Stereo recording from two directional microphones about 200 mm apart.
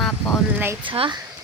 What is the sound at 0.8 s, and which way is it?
Speech, 25° right (ahead or behind).